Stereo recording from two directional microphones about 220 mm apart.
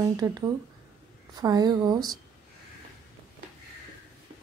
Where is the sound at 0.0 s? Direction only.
15° right (ahead or behind).